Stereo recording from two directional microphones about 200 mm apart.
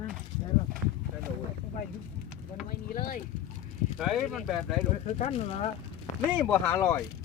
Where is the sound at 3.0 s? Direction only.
45° left (ahead or behind).